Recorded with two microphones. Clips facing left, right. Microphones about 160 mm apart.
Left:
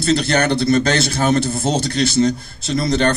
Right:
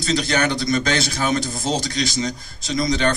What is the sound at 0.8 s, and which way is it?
Speech, 45° left (ahead or behind).